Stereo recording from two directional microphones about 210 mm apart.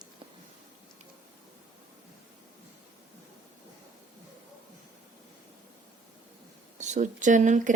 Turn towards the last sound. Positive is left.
turn(degrees=-35)  # may be behind; listen again after turning